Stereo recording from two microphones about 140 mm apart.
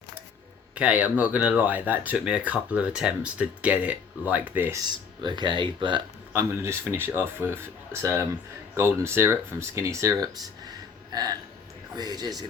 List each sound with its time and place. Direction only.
0.8 s speech: 10° right (ahead or behind)
4.9 s speech: 30° right (ahead or behind)
6.3 s speech: 20° right (ahead or behind)
10.7 s gasp: 30° right (ahead or behind)
11.9 s speech: 30° right (ahead or behind)